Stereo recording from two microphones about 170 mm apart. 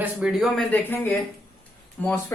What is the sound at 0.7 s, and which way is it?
Speech, 10° left (ahead or behind).